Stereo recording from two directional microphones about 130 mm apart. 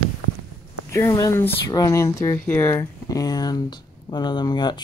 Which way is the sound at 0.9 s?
25° left (ahead or behind).